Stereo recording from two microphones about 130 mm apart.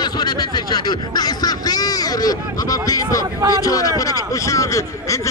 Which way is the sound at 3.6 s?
25° left (ahead or behind).